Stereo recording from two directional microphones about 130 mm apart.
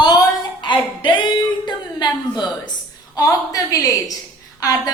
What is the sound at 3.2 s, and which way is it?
A woman's voice, 25° left (ahead or behind).